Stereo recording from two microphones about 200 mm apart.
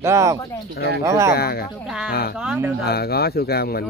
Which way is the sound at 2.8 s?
50° left (ahead or behind).